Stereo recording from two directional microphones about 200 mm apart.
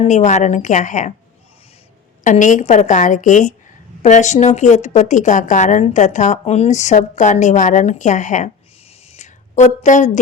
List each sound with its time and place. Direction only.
0.0 s a woman's voice: 35° left (ahead or behind)
2.2 s a woman's voice: 40° left (ahead or behind)
9.1 s a sound: 35° left (ahead or behind)